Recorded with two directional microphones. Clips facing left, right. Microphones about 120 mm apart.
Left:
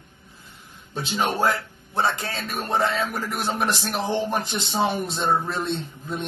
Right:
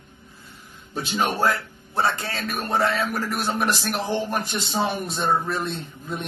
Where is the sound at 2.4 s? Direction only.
20° left (ahead or behind).